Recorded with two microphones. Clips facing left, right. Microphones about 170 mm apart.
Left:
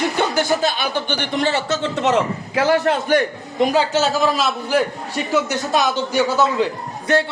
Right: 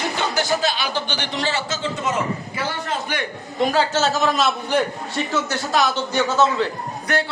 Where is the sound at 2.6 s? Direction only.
85° left.